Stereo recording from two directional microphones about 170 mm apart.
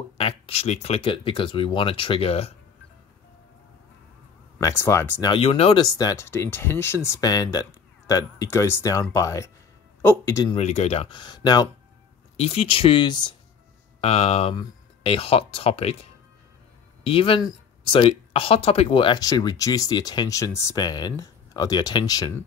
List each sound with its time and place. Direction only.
0.2 s speech: 40° left (ahead or behind)
4.6 s speech: 15° left (ahead or behind)
5.3 s speech: 35° left (ahead or behind); by 10.5 s 15° left (ahead or behind)
10.5 s speech: 40° left (ahead or behind); by 11.7 s 25° left (ahead or behind)
12.4 s speech: 35° left (ahead or behind)
14.0 s speech: 35° left (ahead or behind)